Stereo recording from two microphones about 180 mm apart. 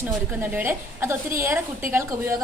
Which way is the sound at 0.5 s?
10° right (ahead or behind).